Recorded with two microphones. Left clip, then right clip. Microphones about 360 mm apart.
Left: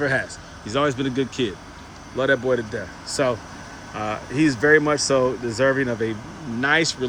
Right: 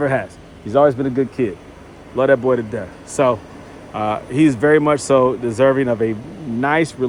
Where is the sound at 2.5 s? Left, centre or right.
Right.